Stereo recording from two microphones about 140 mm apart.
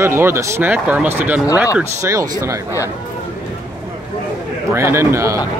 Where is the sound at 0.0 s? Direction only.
20° right (ahead or behind).